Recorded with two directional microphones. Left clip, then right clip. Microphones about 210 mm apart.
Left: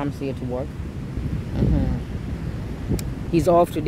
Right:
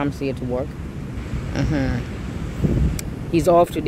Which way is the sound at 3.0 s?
Centre (ahead or behind).